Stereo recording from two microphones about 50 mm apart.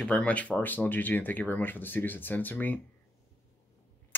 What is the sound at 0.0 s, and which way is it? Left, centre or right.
Speech, left.